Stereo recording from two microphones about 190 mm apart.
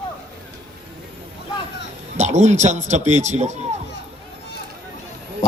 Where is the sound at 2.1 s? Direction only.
40° right (ahead or behind).